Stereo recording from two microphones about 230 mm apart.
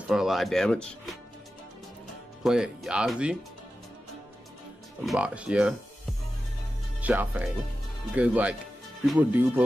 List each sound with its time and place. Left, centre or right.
0.1 s speech: centre
2.4 s speech: centre
5.0 s speech: centre
7.0 s speech: centre